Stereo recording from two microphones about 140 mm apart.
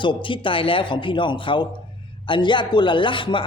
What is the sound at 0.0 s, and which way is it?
A man's voice, 35° left (ahead or behind).